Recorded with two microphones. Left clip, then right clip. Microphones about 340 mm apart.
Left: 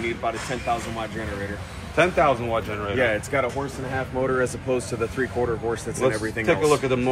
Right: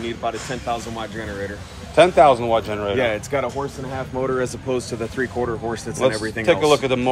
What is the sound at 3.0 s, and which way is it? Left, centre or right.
Speech, right.